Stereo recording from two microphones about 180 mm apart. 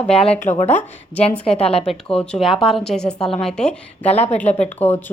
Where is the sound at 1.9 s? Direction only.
5° left (ahead or behind).